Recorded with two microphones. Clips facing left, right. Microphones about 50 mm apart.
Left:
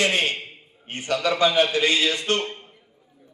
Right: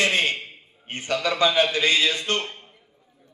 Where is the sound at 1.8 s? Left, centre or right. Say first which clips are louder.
Even; left.